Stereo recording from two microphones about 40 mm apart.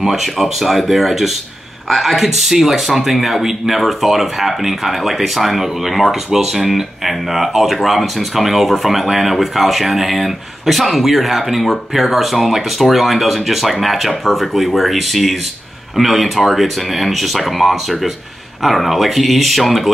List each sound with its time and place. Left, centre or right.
0.0 s speech: centre